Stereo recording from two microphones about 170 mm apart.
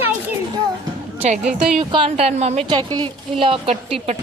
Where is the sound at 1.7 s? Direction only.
30° right (ahead or behind).